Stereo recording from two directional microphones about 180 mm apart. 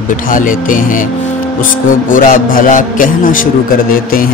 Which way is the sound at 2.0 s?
50° left (ahead or behind).